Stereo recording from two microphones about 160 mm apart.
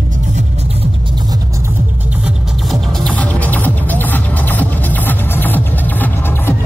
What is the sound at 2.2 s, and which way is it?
Music, centre (ahead or behind).